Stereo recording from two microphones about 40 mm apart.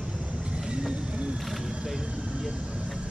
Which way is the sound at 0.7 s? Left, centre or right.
Right.